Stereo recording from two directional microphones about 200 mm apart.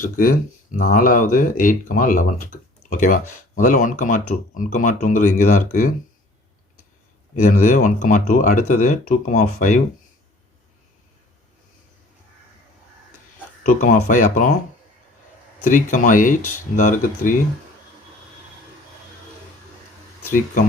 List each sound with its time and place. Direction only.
0.0 s speech: 45° left (ahead or behind)
7.5 s speech: 40° left (ahead or behind)
13.7 s speech: 40° left (ahead or behind)
15.7 s speech: 40° left (ahead or behind)